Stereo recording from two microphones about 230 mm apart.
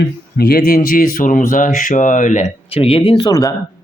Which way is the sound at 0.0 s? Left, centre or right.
Left.